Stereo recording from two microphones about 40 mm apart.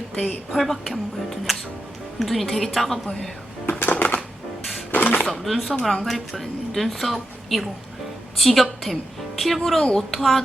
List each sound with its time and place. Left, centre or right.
0.5 s a woman's voice: centre
3.9 s music: left
4.9 s a sound: left
5.2 s a woman's voice: centre